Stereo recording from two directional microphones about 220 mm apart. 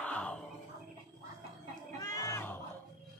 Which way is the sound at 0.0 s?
5° left (ahead or behind).